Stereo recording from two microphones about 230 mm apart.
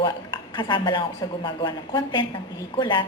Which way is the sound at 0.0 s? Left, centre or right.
Centre.